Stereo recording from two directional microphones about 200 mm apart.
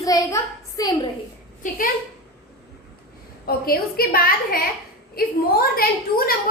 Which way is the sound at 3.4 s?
50° left (ahead or behind).